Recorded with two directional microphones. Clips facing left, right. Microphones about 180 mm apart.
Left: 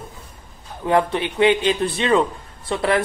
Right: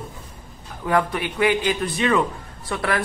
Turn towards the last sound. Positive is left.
turn(degrees=25)  # may be behind; listen again after turning